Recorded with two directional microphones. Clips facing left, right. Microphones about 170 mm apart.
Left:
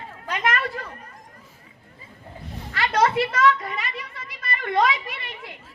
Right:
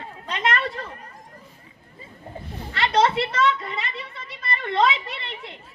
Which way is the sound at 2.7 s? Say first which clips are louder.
Even; 25° right (ahead or behind).